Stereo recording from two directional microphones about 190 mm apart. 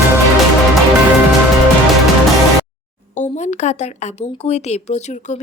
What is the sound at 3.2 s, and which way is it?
Speech, 40° left (ahead or behind).